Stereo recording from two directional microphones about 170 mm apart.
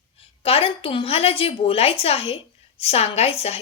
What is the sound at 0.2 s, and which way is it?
Speech, 35° left (ahead or behind).